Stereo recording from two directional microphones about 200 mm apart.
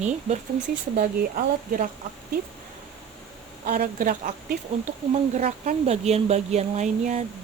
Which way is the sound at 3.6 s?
50° right (ahead or behind).